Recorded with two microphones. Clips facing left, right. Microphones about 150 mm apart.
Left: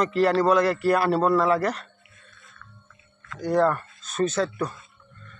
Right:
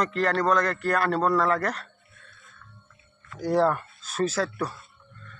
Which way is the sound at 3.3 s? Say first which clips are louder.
Left 1 dB; 5° right (ahead or behind).